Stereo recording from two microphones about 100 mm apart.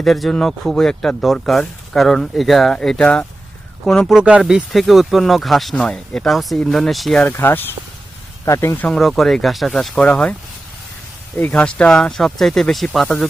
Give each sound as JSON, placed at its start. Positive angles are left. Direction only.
{"t": 0.0, "sound": "speech", "side_deg": 5}
{"t": 4.2, "sound": "speech", "side_deg": -10}
{"t": 7.2, "sound": "speech", "side_deg": 20}
{"t": 9.0, "sound": "speech", "side_deg": 0}
{"t": 9.9, "sound": "speech", "side_deg": 10}
{"t": 11.3, "sound": "speech", "side_deg": 15}